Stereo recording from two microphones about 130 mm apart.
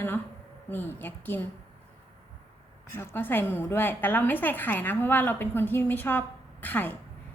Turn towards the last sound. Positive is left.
turn(degrees=15)  # may be behind; listen again after turning